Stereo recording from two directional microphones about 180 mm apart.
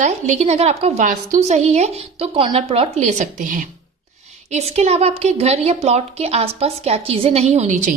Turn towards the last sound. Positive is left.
turn(degrees=-40)  # may be behind; listen again after turning